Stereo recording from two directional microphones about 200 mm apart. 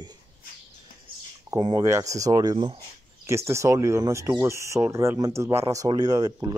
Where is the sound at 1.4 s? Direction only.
20° right (ahead or behind).